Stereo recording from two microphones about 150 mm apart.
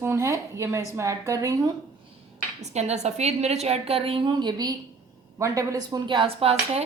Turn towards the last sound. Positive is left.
turn(degrees=-40)  # may be behind; listen again after turning